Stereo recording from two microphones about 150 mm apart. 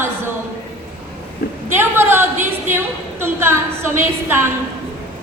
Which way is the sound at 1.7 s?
15° right (ahead or behind).